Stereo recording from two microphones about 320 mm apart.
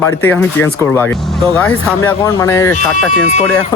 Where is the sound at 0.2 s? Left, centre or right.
Centre.